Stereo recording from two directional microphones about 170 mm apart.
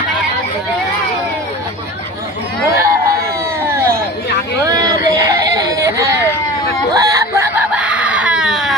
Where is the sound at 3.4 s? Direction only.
15° right (ahead or behind).